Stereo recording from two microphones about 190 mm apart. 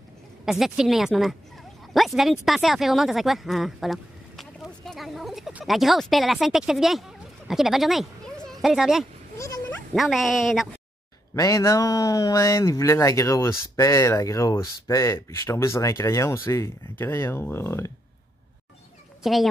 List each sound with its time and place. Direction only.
0.5 s speech: centre (ahead or behind)
11.3 s speech: 15° left (ahead or behind)
19.2 s speech: centre (ahead or behind)